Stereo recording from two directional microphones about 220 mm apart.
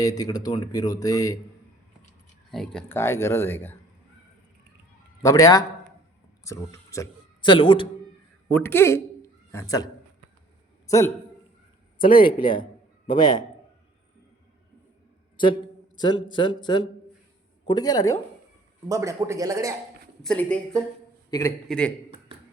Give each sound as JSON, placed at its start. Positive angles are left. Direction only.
{"t": 0.0, "sound": "speech", "side_deg": 15}
{"t": 2.5, "sound": "speech", "side_deg": 0}
{"t": 5.2, "sound": "speech", "side_deg": 15}
{"t": 8.4, "sound": "a man's voice", "side_deg": 10}
{"t": 11.9, "sound": "a man's voice", "side_deg": 40}
{"t": 16.0, "sound": "speech", "side_deg": 20}
{"t": 18.9, "sound": "speech", "side_deg": -15}
{"t": 20.2, "sound": "a woman's voice", "side_deg": 5}
{"t": 21.2, "sound": "a man's voice", "side_deg": 15}
{"t": 21.7, "sound": "a woman's voice", "side_deg": 5}